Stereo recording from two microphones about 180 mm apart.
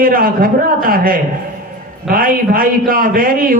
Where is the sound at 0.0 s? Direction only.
55° right (ahead or behind).